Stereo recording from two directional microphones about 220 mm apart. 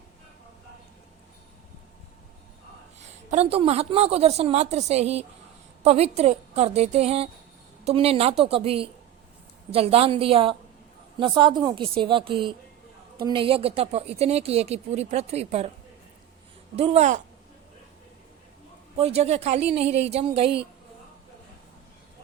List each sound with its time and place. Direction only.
3.0 s a woman's voice: 30° right (ahead or behind)
16.7 s a woman's voice: 30° right (ahead or behind)
18.9 s a woman's voice: 30° right (ahead or behind)